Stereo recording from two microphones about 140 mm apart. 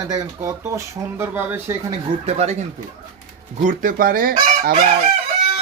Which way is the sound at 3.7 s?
85° right.